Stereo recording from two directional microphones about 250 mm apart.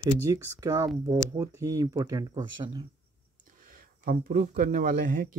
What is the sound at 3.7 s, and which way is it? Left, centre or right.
Speech, right.